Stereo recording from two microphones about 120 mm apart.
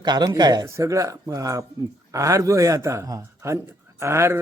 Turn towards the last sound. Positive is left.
turn(degrees=-20)  # may be behind; listen again after turning